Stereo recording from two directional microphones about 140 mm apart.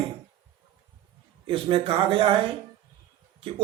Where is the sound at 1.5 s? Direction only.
40° right (ahead or behind).